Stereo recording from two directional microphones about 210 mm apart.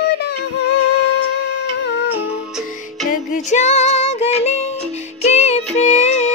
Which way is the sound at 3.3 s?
35° left (ahead or behind).